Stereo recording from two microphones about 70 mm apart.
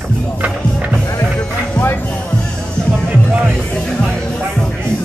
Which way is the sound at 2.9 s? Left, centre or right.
Centre.